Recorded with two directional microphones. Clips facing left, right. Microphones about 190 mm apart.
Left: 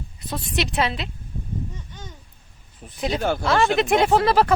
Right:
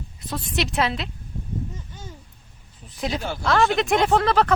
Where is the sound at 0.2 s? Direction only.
Centre (ahead or behind).